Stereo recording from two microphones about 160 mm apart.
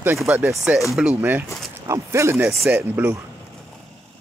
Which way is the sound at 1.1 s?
15° right (ahead or behind).